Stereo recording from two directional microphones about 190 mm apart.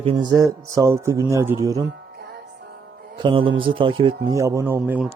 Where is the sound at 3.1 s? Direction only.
25° right (ahead or behind).